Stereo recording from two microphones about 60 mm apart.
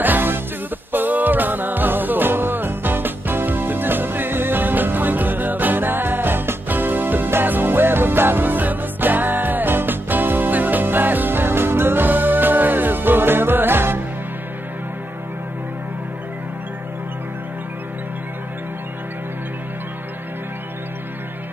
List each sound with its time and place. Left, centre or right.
0.0 s music: right